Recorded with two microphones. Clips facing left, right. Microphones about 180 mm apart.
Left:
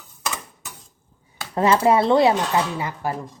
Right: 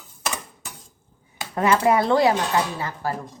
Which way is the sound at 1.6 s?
30° left (ahead or behind).